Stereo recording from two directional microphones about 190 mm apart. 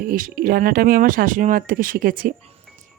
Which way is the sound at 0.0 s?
45° right (ahead or behind).